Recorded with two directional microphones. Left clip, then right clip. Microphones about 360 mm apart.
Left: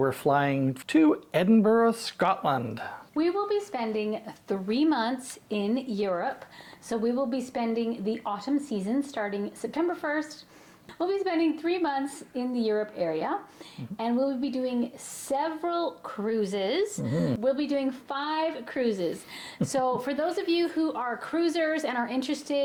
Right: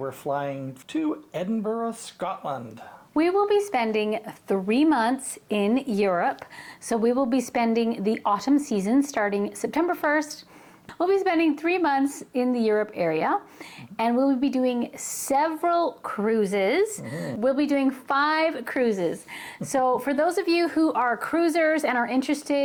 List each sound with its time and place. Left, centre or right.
0.0 s speech: left
3.2 s speech: right